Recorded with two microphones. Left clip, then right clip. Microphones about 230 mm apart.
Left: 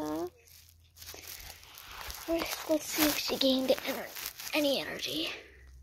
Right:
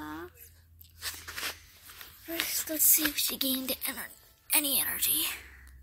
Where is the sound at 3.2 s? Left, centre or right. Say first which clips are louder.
Left 3 dB; right.